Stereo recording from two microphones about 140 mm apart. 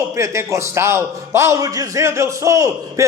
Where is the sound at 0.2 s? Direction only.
20° right (ahead or behind).